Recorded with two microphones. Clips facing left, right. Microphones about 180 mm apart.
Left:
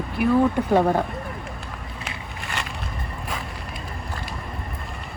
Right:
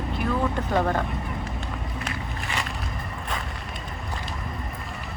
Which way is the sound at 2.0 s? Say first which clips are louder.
Right 2 dB; centre (ahead or behind).